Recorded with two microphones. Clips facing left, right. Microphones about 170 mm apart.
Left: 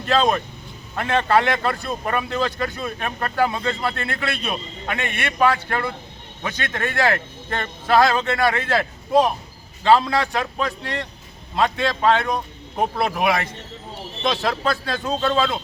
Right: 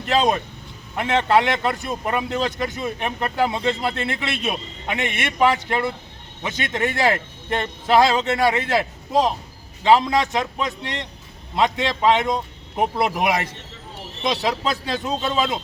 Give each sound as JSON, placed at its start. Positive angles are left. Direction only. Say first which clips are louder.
{"t": 0.0, "sound": "a man's voice", "louder": "even", "side_deg": -20}